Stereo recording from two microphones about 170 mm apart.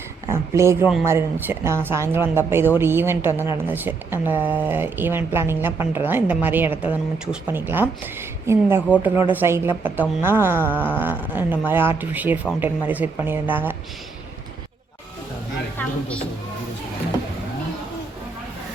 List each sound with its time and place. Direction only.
0.3 s a woman's voice: 15° right (ahead or behind)
15.8 s music: 10° left (ahead or behind)